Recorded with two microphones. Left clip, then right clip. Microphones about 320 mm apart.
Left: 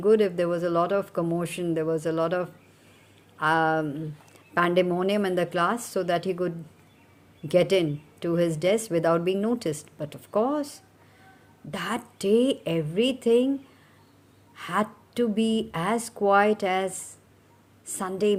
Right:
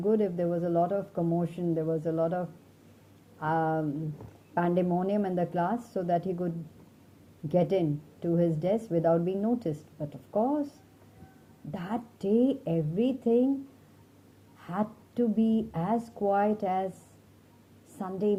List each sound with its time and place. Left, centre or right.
0.0 s speech: left
11.7 s speech: left
14.5 s speech: left
17.9 s speech: left